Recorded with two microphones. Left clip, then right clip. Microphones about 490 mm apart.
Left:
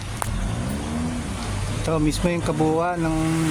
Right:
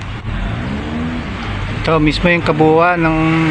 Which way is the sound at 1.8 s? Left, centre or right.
Left.